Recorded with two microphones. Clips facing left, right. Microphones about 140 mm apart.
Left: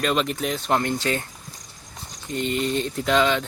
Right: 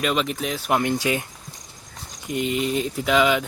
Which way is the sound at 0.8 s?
15° right (ahead or behind).